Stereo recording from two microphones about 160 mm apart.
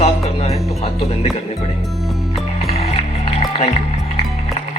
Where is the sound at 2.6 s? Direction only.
40° left (ahead or behind).